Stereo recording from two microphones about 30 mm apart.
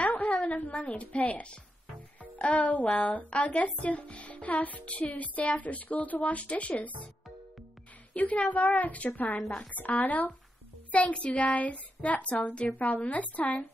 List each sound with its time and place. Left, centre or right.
0.0 s a woman's voice: left
8.1 s speech: left
9.6 s a woman's voice: left
10.9 s a child's voice: left
12.7 s speech: left